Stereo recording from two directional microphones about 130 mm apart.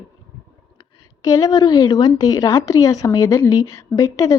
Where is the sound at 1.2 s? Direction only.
25° left (ahead or behind).